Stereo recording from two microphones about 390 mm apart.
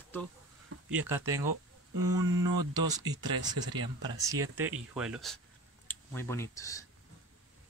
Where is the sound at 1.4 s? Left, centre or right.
Right.